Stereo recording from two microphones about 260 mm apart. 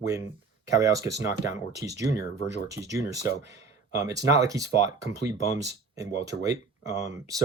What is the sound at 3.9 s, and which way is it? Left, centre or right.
Speech, centre.